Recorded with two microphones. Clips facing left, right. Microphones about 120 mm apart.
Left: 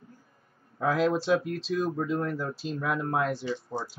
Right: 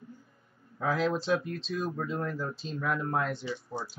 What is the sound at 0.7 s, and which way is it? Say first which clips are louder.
A man's voice: left 3 dB; centre (ahead or behind).